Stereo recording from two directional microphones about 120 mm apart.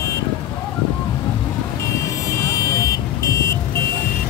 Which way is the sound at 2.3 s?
25° left (ahead or behind).